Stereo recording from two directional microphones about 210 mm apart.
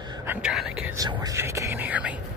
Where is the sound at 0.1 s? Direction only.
10° right (ahead or behind).